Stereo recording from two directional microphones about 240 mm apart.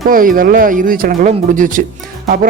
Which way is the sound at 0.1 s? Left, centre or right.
Right.